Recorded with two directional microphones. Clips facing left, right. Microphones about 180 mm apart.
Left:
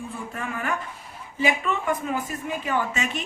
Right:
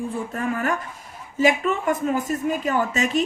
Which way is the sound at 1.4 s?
45° right (ahead or behind).